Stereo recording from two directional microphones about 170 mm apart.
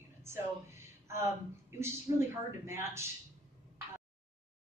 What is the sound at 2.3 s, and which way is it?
Speech, 15° right (ahead or behind).